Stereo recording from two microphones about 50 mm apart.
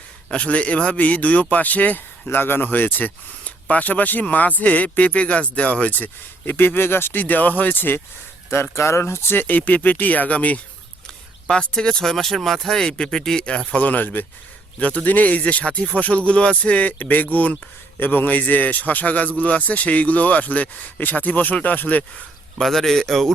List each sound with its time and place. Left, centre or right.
0.3 s speech: left
8.7 s speech: left
9.3 s speech: left
11.0 s speech: centre
13.7 s speech: left
17.0 s speech: left
22.6 s speech: centre